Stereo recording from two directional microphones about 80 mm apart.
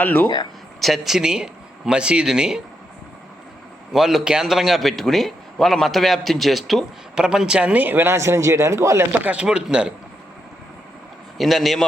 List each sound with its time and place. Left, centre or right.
0.0 s speech: centre
0.8 s speech: centre
3.9 s a man's voice: centre; by 9.2 s right
9.2 s speech: centre
11.3 s a man's voice: centre